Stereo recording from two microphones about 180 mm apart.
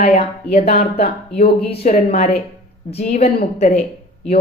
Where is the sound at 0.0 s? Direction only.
40° left (ahead or behind).